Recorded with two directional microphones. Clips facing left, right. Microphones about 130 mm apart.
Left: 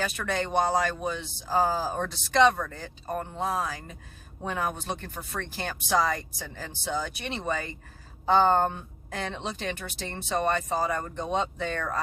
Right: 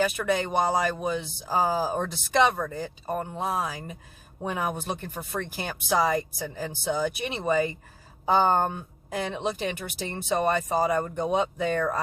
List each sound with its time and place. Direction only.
0.0 s speech: 10° right (ahead or behind)